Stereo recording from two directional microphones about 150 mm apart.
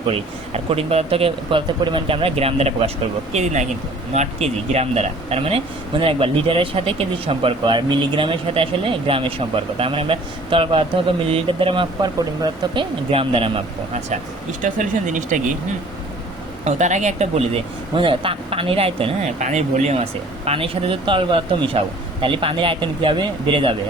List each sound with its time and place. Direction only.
0.1 s speech: 40° right (ahead or behind)
14.6 s speech: 55° right (ahead or behind)
16.6 s speech: 50° right (ahead or behind)
19.4 s speech: 50° right (ahead or behind); by 23.7 s 35° right (ahead or behind)